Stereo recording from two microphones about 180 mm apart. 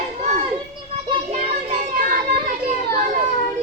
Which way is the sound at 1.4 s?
45° right (ahead or behind).